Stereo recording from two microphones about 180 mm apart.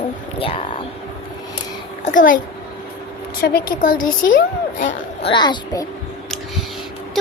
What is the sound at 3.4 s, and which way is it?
Speech, 55° left (ahead or behind).